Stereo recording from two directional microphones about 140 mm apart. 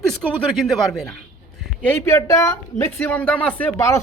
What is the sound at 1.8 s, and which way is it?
Speech, 15° left (ahead or behind).